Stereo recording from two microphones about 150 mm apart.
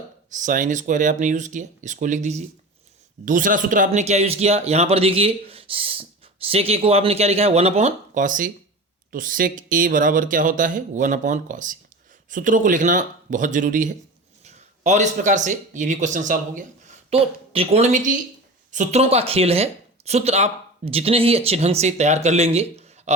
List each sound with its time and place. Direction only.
0.3 s speech: 60° right (ahead or behind)
17.1 s speech: 40° right (ahead or behind)